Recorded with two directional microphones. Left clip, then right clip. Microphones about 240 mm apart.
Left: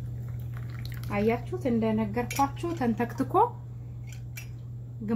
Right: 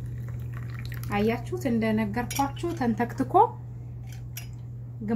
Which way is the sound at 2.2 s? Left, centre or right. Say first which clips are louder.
Left 1 dB; centre.